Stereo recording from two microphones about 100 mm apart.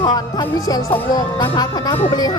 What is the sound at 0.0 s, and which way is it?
Speech, 45° left (ahead or behind).